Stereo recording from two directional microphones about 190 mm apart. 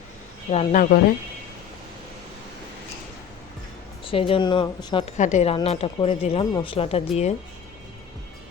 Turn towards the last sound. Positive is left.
turn(degrees=35)  # may be behind; listen again after turning